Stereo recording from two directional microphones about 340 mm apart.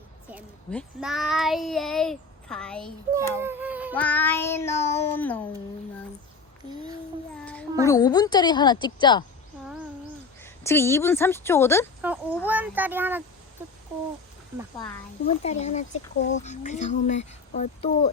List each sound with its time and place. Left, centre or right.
0.3 s speech: centre
7.9 s speech: centre
10.4 s speech: centre
12.0 s speech: centre
14.8 s speech: centre